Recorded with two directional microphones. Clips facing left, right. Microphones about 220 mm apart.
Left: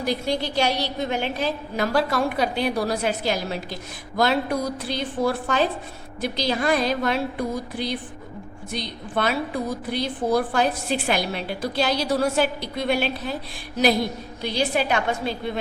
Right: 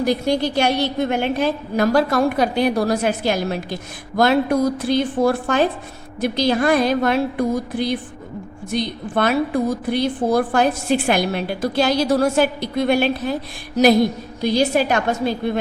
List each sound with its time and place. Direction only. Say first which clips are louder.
0.0 s a woman's voice: right 6 dB; 50° right (ahead or behind)
14.4 s a woman's voice: right 6 dB; 40° right (ahead or behind)